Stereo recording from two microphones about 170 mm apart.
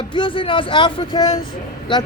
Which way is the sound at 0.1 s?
30° left (ahead or behind).